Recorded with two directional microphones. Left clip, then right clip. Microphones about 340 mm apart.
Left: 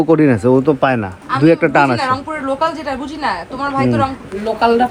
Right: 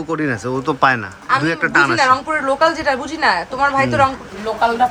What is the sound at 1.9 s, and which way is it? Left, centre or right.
A woman's voice, right.